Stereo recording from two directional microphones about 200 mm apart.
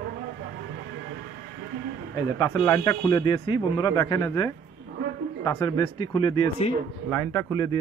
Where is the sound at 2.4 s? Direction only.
15° left (ahead or behind).